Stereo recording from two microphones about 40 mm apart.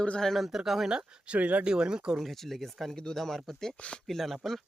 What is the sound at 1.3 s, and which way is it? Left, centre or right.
Speech, right.